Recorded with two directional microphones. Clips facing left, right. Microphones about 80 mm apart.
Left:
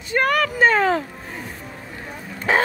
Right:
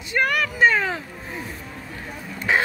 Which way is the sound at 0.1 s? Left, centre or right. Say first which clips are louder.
Left 3 dB; left.